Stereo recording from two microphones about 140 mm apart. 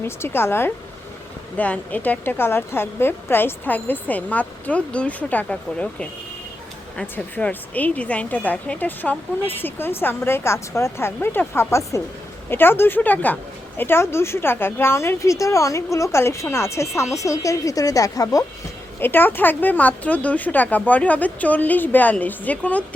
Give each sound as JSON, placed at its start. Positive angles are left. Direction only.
{"t": 0.0, "sound": "a woman's voice", "side_deg": 15}
{"t": 18.9, "sound": "a woman's voice", "side_deg": 15}